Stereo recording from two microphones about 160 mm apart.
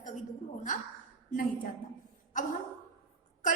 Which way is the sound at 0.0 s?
50° left (ahead or behind).